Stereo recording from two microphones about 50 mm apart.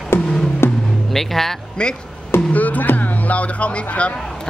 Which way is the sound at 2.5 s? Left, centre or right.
Left.